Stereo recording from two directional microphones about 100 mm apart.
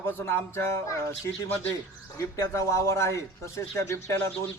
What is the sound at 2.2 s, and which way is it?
Speech, 30° left (ahead or behind).